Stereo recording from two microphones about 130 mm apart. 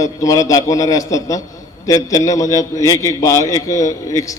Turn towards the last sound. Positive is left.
turn(degrees=25)  # may be behind; listen again after turning